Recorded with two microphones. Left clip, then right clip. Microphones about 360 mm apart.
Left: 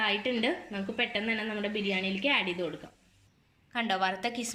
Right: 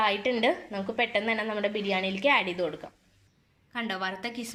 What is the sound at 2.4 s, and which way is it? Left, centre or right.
Speech, right.